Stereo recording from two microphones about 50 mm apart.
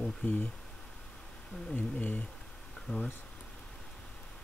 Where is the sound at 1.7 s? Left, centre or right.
Left.